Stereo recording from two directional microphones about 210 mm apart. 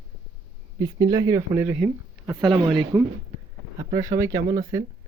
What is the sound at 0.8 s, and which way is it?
Speech, 20° right (ahead or behind).